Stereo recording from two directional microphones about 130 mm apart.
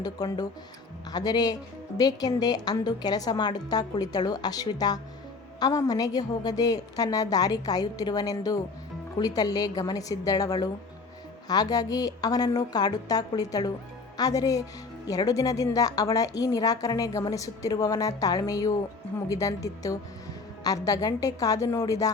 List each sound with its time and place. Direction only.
0.0 s a woman's voice: 30° left (ahead or behind)